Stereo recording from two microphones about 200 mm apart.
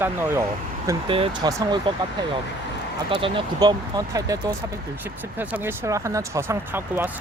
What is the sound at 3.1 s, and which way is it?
Speech, 20° right (ahead or behind).